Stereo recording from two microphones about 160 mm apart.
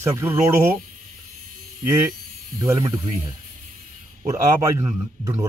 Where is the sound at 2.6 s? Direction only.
20° right (ahead or behind).